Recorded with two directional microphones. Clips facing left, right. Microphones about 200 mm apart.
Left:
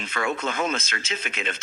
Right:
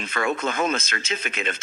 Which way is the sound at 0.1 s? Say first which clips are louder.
Right 2 dB; 50° right (ahead or behind).